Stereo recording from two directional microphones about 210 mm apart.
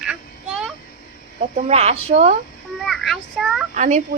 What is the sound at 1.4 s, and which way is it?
Speech, 35° right (ahead or behind).